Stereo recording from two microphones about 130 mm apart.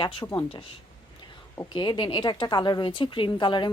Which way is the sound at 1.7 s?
35° left (ahead or behind).